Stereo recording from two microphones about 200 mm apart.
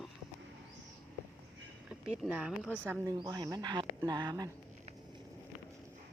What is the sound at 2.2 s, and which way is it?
Speech, 5° right (ahead or behind).